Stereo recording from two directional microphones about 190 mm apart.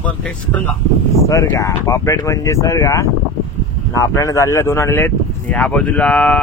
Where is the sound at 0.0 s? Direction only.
5° left (ahead or behind).